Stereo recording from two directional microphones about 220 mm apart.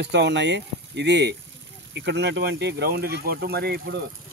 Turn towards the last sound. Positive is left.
turn(degrees=-45)  # may be behind; listen again after turning